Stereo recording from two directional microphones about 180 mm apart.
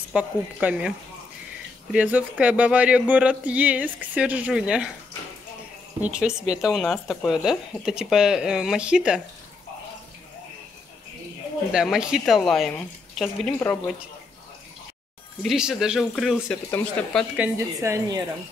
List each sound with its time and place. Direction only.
0.1 s speech: 5° right (ahead or behind)
6.0 s speech: 5° right (ahead or behind)
11.7 s speech: 5° right (ahead or behind)
15.4 s speech: centre (ahead or behind)
17.4 s speech: 15° right (ahead or behind)